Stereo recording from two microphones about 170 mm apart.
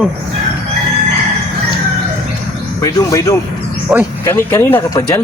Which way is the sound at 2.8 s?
20° left (ahead or behind).